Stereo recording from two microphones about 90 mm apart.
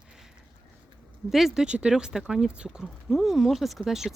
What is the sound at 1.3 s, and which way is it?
Speech, 5° right (ahead or behind).